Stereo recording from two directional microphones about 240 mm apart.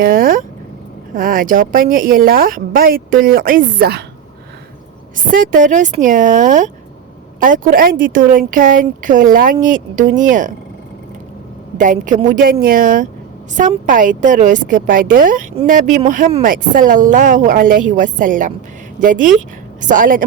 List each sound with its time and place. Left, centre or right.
0.0 s a woman's voice: right
5.1 s a woman's voice: right
11.8 s a woman's voice: right